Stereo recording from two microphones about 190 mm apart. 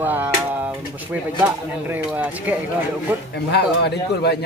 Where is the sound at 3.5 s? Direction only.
60° left (ahead or behind).